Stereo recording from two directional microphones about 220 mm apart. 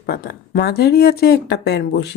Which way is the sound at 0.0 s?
45° left (ahead or behind).